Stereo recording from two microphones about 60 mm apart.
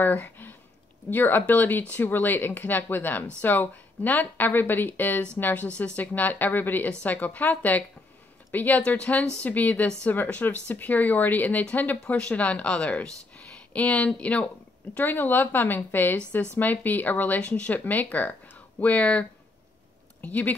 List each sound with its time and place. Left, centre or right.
0.0 s speech: left
15.0 s speech: left